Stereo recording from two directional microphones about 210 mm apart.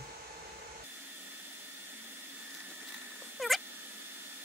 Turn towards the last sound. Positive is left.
turn(degrees=0)  # may be behind; listen again after turning